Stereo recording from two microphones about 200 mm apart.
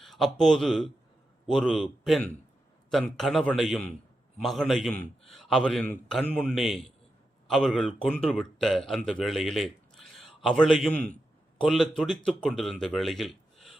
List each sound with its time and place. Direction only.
0.0 s a man's voice: centre (ahead or behind)
11.0 s a sound: 35° left (ahead or behind)
11.6 s a man's voice: centre (ahead or behind)